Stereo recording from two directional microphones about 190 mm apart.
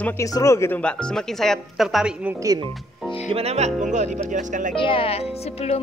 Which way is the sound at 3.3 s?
35° right (ahead or behind).